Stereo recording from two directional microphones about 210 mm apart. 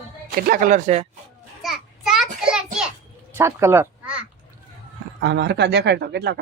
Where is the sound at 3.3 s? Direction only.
10° right (ahead or behind).